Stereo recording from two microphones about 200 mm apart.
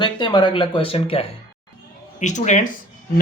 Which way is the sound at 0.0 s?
25° left (ahead or behind).